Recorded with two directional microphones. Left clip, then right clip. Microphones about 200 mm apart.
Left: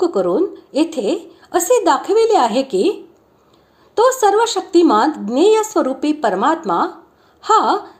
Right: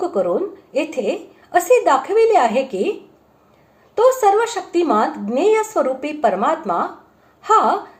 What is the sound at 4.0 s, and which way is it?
A woman's voice, 40° left (ahead or behind).